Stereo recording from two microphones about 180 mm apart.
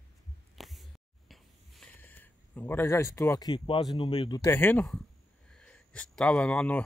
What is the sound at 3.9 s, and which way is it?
Speech, 30° left (ahead or behind).